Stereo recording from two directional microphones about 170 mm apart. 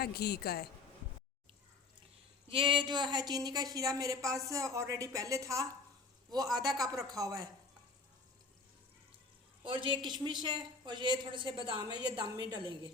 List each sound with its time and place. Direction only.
0.0 s a woman's voice: 70° left (ahead or behind)
2.5 s a woman's voice: 30° right (ahead or behind)
9.6 s a woman's voice: 30° right (ahead or behind)